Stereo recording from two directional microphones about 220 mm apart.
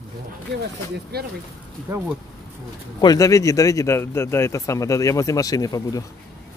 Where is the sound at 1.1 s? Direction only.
45° right (ahead or behind).